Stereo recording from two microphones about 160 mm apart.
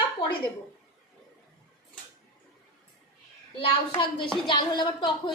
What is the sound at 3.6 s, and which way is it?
Speech, 30° left (ahead or behind).